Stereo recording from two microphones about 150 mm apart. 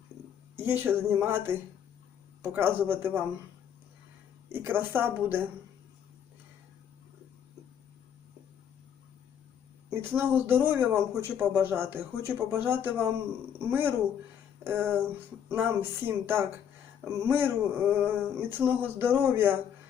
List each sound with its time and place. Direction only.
0.5 s speech: 15° right (ahead or behind)
4.5 s speech: 15° right (ahead or behind)
10.0 s speech: 15° right (ahead or behind)
14.6 s a sound: 15° right (ahead or behind)
15.4 s speech: 15° right (ahead or behind)